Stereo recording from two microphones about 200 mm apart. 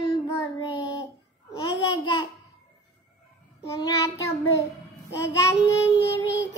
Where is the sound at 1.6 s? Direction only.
20° left (ahead or behind).